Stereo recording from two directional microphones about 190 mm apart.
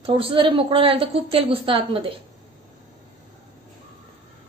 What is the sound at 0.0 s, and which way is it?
A woman's voice, 30° right (ahead or behind).